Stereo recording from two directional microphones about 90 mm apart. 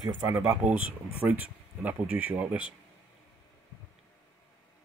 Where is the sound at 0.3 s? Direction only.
25° right (ahead or behind).